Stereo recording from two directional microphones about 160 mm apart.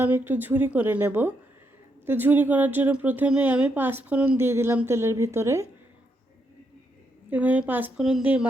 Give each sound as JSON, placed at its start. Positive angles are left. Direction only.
{"t": 0.0, "sound": "speech", "side_deg": -10}
{"t": 7.3, "sound": "speech", "side_deg": -10}